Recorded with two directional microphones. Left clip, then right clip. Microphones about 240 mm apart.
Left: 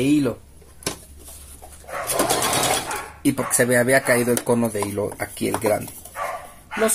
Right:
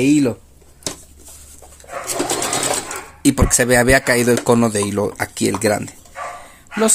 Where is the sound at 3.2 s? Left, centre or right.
Right.